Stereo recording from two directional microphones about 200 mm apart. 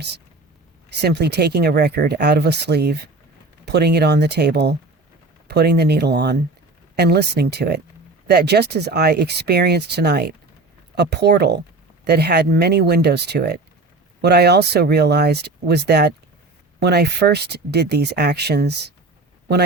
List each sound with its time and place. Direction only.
1.0 s speech: 55° right (ahead or behind)